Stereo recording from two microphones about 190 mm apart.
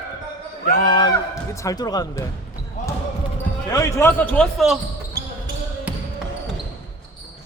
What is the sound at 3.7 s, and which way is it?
A man's voice, 15° left (ahead or behind).